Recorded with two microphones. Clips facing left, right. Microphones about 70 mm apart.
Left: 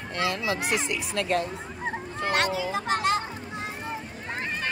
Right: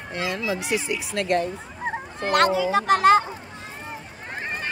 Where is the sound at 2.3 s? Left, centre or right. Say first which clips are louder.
Right 8 dB; right.